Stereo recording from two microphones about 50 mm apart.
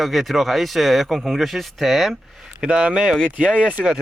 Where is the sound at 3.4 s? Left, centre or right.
Right.